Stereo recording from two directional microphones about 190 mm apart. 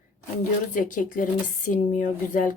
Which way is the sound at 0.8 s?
45° left (ahead or behind).